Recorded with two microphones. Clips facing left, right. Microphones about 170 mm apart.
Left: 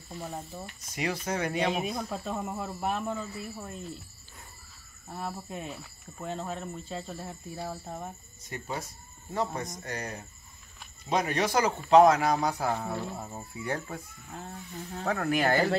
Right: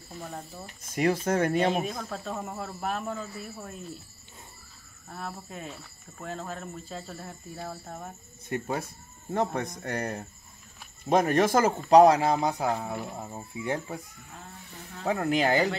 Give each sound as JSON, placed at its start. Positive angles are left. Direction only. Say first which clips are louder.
{"t": 0.2, "sound": "speech", "louder": "left 1 dB", "side_deg": 0}
{"t": 0.8, "sound": "speech", "louder": "right 7 dB", "side_deg": -50}
{"t": 2.0, "sound": "speech", "louder": "left 1 dB", "side_deg": 5}
{"t": 5.1, "sound": "speech", "louder": "left 2 dB", "side_deg": 5}
{"t": 8.5, "sound": "speech", "louder": "right 6 dB", "side_deg": -55}
{"t": 12.0, "sound": "speech", "louder": "right 2 dB", "side_deg": -30}
{"t": 15.0, "sound": "speech", "louder": "right 2 dB", "side_deg": -20}